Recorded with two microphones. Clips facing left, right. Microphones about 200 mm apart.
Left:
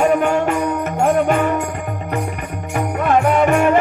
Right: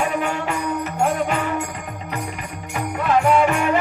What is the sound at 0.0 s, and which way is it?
Music, 40° left (ahead or behind).